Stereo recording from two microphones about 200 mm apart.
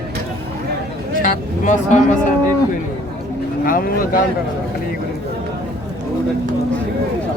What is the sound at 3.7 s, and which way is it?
Speech, 45° left (ahead or behind).